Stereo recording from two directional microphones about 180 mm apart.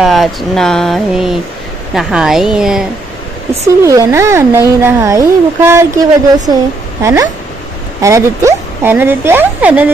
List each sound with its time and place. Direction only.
0.0 s speech: centre (ahead or behind)
3.6 s speech: 15° right (ahead or behind)